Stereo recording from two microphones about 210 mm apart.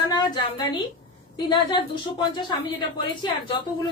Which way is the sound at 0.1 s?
20° left (ahead or behind).